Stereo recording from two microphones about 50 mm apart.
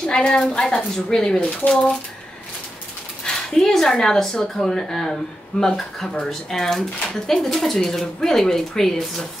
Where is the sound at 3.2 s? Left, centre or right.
Centre.